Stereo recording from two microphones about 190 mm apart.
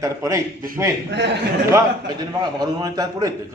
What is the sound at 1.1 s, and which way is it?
Speech, 65° right (ahead or behind).